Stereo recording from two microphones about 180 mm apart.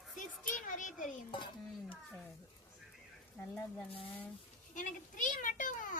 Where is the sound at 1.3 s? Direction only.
25° left (ahead or behind).